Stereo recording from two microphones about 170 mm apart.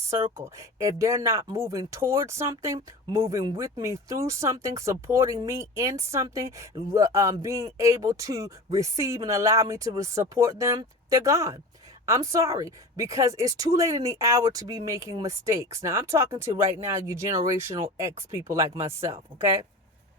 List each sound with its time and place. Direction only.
0.3 s speech: 15° right (ahead or behind)